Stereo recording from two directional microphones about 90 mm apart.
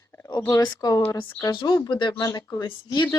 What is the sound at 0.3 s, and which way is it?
Speech, 50° left (ahead or behind).